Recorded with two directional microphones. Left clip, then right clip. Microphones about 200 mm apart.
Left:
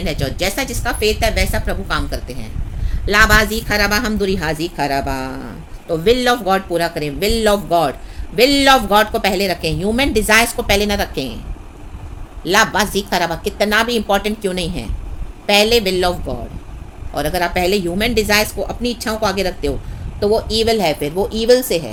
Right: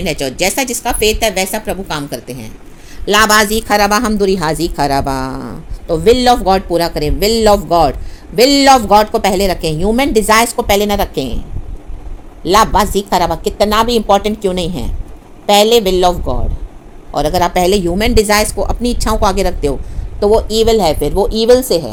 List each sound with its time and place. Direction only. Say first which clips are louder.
0.0 s a woman's voice: right 5 dB; 20° right (ahead or behind)
12.4 s a woman's voice: right 4 dB; 15° right (ahead or behind)